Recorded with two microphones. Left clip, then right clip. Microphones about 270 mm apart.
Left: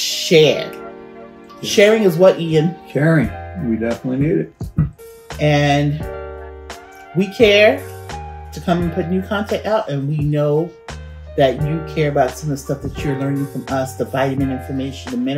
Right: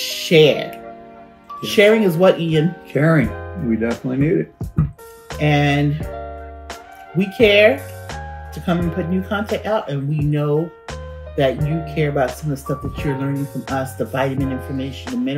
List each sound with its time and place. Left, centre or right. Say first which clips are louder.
0.0 s music: left 1 dB; centre
1.6 s speech: left 1 dB; centre